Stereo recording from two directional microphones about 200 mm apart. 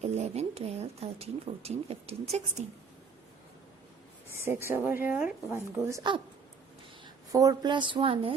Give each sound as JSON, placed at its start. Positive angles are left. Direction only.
{"t": 0.0, "sound": "speech", "side_deg": -30}
{"t": 4.7, "sound": "a woman's voice", "side_deg": -10}